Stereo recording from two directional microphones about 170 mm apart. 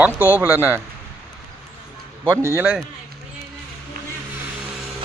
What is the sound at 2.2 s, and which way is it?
Speech, 15° right (ahead or behind).